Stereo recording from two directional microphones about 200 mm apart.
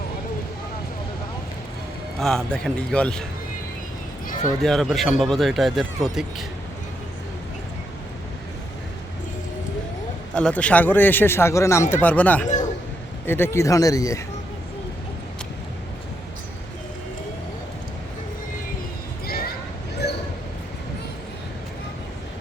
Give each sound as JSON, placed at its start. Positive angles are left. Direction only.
{"t": 2.1, "sound": "speech", "side_deg": 0}
{"t": 4.6, "sound": "speech", "side_deg": 0}
{"t": 10.3, "sound": "speech", "side_deg": 5}
{"t": 12.5, "sound": "a sound", "side_deg": 35}
{"t": 13.2, "sound": "speech", "side_deg": 10}
{"t": 19.2, "sound": "a sound", "side_deg": 50}